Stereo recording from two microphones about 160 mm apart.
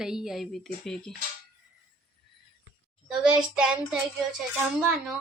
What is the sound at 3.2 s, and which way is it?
Speech, 5° right (ahead or behind).